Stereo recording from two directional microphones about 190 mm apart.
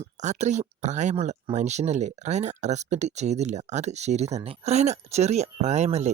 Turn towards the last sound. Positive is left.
turn(degrees=-35)  # may be behind; listen again after turning